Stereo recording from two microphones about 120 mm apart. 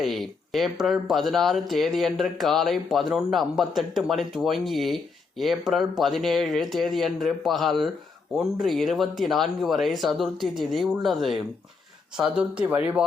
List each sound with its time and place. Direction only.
0.0 s speech: centre (ahead or behind)